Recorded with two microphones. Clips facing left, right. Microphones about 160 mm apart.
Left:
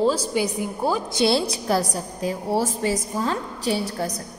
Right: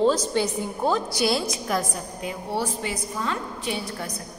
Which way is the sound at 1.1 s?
25° left (ahead or behind).